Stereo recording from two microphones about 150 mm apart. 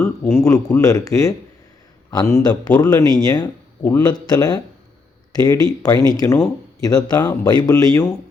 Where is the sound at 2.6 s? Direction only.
10° left (ahead or behind).